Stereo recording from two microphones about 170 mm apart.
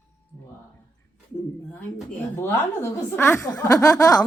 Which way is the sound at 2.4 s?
15° left (ahead or behind).